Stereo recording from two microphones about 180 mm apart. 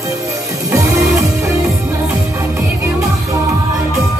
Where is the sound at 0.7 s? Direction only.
15° right (ahead or behind).